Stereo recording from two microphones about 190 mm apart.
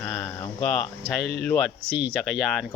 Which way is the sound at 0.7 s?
Centre (ahead or behind).